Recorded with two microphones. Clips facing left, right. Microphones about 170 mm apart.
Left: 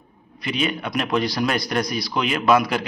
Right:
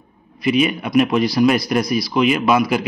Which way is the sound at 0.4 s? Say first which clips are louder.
Right 7 dB; 10° right (ahead or behind).